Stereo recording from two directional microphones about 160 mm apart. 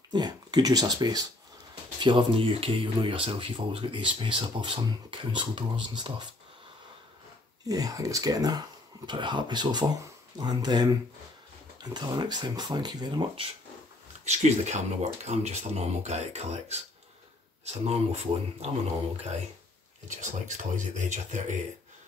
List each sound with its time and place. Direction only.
0.1 s speech: 25° right (ahead or behind)
7.6 s speech: 20° right (ahead or behind)
14.2 s speech: 45° right (ahead or behind)
20.1 s speech: 50° right (ahead or behind)